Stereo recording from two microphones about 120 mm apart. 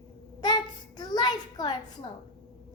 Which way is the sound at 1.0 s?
40° left (ahead or behind).